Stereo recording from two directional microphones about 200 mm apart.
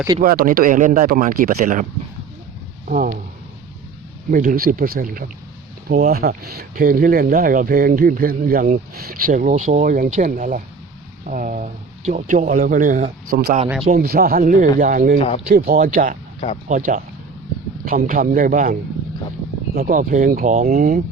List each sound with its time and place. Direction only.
0.2 s speech: 45° right (ahead or behind)
4.3 s speech: 45° right (ahead or behind)